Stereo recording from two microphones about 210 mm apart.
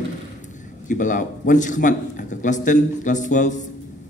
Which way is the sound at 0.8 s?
40° left (ahead or behind).